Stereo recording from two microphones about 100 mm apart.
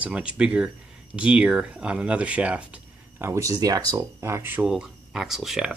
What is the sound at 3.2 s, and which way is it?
Speech, 30° right (ahead or behind).